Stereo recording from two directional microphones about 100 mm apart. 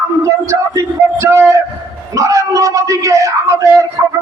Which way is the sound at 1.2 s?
30° right (ahead or behind).